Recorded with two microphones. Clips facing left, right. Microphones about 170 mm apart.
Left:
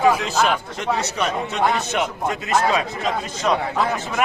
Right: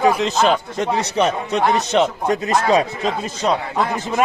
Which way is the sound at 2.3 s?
35° right (ahead or behind).